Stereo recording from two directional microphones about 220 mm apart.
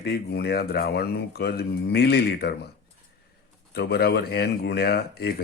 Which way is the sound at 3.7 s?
45° left (ahead or behind).